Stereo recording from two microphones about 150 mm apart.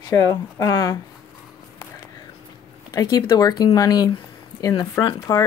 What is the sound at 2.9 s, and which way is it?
Speech, 25° left (ahead or behind).